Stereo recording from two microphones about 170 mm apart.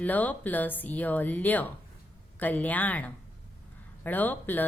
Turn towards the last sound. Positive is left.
turn(degrees=10)  # may be behind; listen again after turning